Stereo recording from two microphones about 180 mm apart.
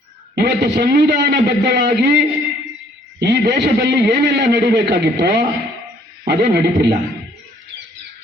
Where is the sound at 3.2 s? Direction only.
70° right (ahead or behind).